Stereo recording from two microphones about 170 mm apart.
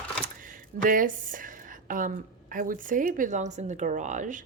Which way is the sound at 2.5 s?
55° right (ahead or behind).